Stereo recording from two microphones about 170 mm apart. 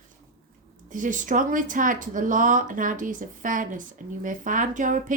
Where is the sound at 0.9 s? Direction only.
50° right (ahead or behind).